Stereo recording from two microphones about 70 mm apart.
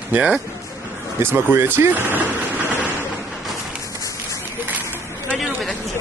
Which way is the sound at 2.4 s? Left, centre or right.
Right.